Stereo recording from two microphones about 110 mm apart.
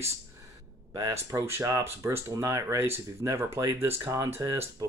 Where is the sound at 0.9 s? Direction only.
30° right (ahead or behind).